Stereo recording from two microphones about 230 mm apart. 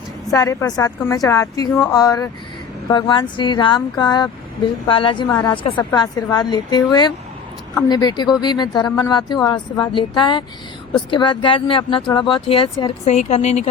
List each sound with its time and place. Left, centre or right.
0.3 s a woman's voice: centre